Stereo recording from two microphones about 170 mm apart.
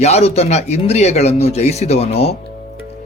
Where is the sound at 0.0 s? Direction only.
40° left (ahead or behind).